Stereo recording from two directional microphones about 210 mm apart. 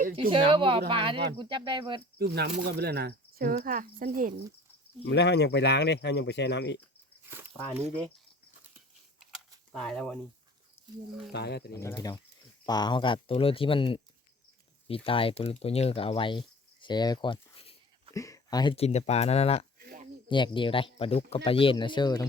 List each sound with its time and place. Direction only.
0.2 s speech: 25° right (ahead or behind)
2.1 s speech: 50° right (ahead or behind)
5.0 s speech: 55° left (ahead or behind)
7.3 s a sound: 10° right (ahead or behind)
9.7 s speech: 5° left (ahead or behind)
10.8 s a sound: 10° left (ahead or behind)
11.3 s speech: 50° left (ahead or behind)
11.7 s speech: 10° left (ahead or behind)
16.8 s a sound: 20° left (ahead or behind)
18.1 s speech: 15° left (ahead or behind)